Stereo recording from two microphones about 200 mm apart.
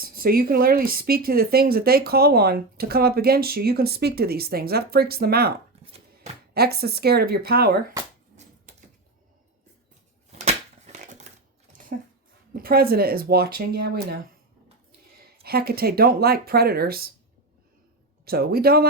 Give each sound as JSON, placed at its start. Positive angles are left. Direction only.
{"t": 0.0, "sound": "speech", "side_deg": -45}
{"t": 5.8, "sound": "chopping", "side_deg": -30}
{"t": 6.5, "sound": "speech", "side_deg": -50}
{"t": 10.3, "sound": "a sound", "side_deg": -35}
{"t": 12.5, "sound": "speech", "side_deg": -50}
{"t": 15.4, "sound": "speech", "side_deg": -50}
{"t": 18.3, "sound": "speech", "side_deg": -50}